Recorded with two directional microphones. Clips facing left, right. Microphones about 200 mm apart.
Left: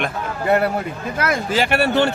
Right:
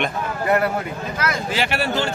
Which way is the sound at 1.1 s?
55° left (ahead or behind).